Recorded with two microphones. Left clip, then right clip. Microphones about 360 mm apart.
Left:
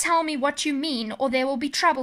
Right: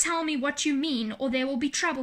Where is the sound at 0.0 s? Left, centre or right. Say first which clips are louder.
Left 5 dB; centre.